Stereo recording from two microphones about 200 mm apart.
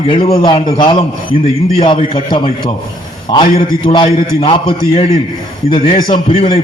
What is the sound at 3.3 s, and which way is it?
A man's voice, 25° left (ahead or behind).